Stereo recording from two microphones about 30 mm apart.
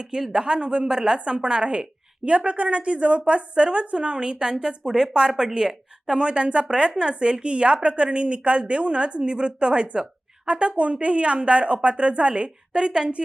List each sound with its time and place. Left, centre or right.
0.0 s speech: centre
1.2 s a woman's voice: right
4.8 s speech: centre
5.5 s a woman's voice: right